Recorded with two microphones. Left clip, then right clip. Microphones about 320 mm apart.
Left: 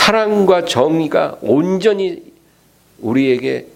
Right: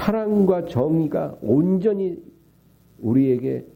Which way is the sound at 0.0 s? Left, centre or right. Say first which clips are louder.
Left 9 dB; centre.